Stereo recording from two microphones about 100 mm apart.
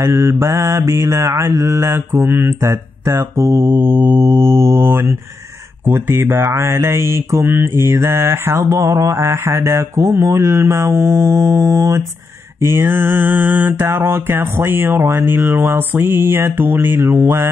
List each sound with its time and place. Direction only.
0.0 s speech: 30° right (ahead or behind)
5.9 s speech: 25° right (ahead or behind)